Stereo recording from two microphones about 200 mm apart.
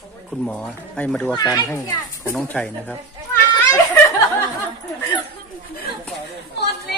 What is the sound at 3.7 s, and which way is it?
Snicker, 15° left (ahead or behind).